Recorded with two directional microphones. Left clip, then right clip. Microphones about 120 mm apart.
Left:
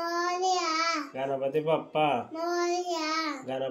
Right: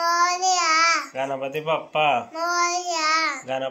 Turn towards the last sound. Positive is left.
turn(degrees=25)  # may be behind; listen again after turning